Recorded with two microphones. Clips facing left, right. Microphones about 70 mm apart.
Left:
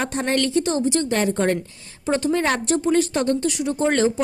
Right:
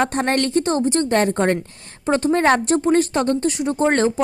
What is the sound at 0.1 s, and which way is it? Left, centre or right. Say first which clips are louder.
Speech: right 2 dB; right.